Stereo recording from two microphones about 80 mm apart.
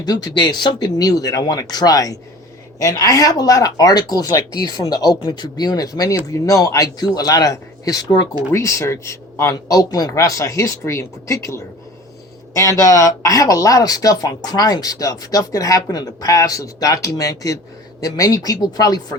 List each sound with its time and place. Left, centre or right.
0.0 s speech: left
8.5 s a man's voice: left